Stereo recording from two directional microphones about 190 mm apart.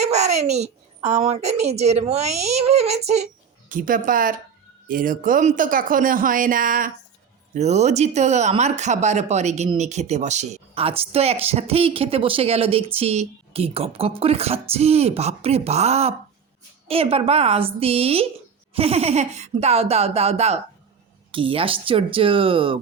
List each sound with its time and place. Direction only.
0.0 s speech: 35° right (ahead or behind)
3.7 s speech: 45° right (ahead or behind); by 22.8 s 30° right (ahead or behind)